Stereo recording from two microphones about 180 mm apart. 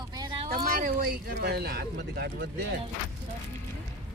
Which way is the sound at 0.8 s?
55° right (ahead or behind).